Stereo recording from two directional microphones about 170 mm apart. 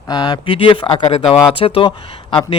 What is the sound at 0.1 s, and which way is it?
Speech, 25° left (ahead or behind).